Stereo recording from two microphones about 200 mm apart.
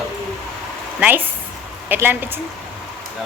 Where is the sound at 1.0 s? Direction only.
10° right (ahead or behind).